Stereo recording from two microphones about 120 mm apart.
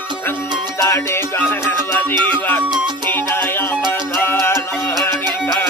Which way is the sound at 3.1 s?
15° left (ahead or behind).